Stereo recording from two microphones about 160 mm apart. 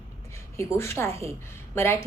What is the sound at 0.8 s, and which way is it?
A woman's voice, 15° left (ahead or behind).